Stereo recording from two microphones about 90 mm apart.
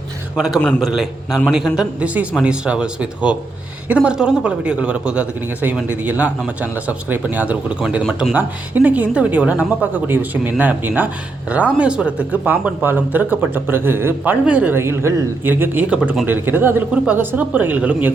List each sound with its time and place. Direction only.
0.3 s a man's voice: 5° right (ahead or behind)
14.8 s a man's voice: 30° right (ahead or behind)